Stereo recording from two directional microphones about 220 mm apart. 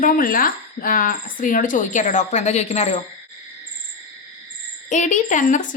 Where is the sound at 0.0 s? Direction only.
40° left (ahead or behind).